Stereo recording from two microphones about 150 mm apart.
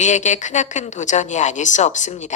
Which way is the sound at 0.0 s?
55° left (ahead or behind).